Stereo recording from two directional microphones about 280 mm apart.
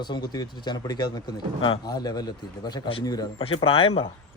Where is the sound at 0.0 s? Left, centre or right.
Centre.